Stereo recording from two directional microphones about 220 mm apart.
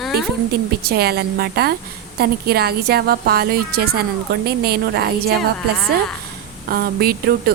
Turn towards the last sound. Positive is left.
turn(degrees=-45)  # may be behind; listen again after turning